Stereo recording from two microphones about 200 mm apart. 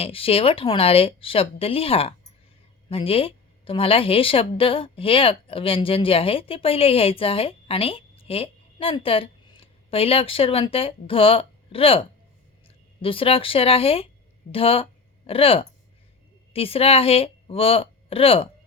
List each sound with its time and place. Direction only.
0.0 s a woman's voice: 30° left (ahead or behind)